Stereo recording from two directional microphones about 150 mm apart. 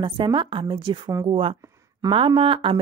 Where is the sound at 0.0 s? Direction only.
35° right (ahead or behind).